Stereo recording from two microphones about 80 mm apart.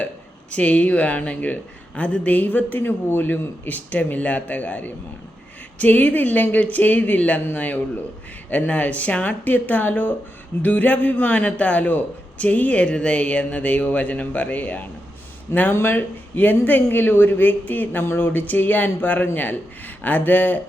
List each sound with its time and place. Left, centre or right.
0.5 s a man's voice: centre